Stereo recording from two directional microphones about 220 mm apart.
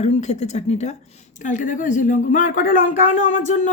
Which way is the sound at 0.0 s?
30° left (ahead or behind).